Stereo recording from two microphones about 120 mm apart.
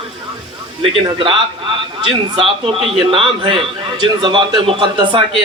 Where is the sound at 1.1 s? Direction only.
45° right (ahead or behind).